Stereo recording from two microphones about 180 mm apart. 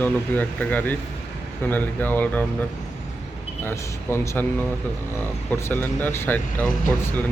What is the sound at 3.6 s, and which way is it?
Speech, 15° left (ahead or behind).